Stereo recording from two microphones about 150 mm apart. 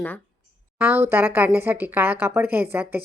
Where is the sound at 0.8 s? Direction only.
15° right (ahead or behind).